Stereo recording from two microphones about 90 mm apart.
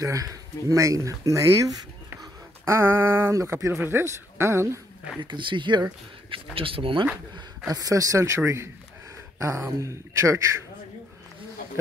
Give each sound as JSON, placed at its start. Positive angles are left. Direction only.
{"t": 0.0, "sound": "speech", "side_deg": -40}
{"t": 5.2, "sound": "speech", "side_deg": -65}
{"t": 6.3, "sound": "speech", "side_deg": -85}
{"t": 7.3, "sound": "speech", "side_deg": -45}